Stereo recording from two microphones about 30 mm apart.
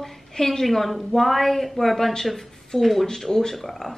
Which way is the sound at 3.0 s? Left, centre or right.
Centre.